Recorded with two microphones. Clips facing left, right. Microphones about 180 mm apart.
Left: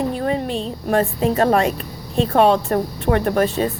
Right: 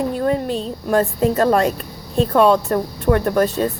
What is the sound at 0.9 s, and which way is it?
Speech, 40° right (ahead or behind).